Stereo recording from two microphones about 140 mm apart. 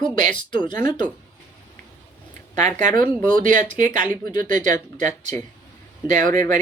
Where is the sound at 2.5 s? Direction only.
60° right (ahead or behind).